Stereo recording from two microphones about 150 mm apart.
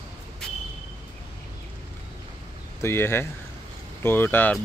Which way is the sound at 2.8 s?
15° left (ahead or behind).